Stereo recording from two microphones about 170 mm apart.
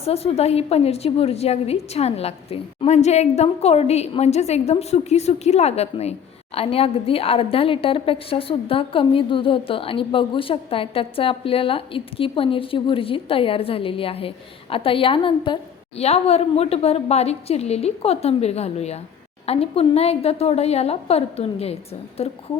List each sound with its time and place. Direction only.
0.0 s a woman's voice: 35° left (ahead or behind)